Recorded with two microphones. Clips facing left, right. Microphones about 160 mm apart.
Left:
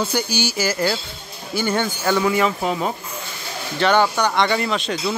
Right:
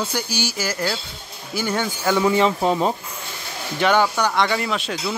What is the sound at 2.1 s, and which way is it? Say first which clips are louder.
Speech: right 1 dB; 25° right (ahead or behind).